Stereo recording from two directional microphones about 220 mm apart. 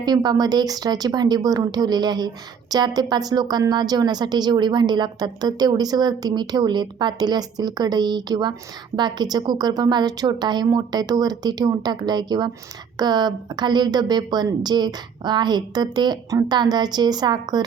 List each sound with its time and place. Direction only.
0.0 s speech: 20° right (ahead or behind)